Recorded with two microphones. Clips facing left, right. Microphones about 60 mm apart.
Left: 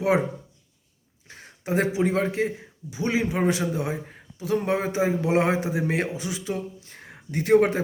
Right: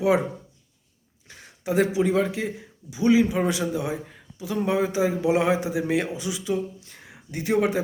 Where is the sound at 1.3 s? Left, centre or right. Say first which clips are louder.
Even; left.